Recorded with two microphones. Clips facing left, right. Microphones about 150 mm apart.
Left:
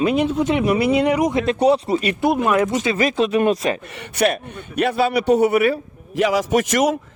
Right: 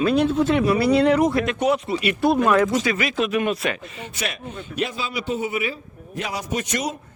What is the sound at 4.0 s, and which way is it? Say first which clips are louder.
A man's voice: left 11 dB; 60° left (ahead or behind).